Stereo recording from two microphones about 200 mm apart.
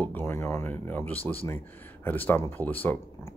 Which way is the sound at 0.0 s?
10° left (ahead or behind).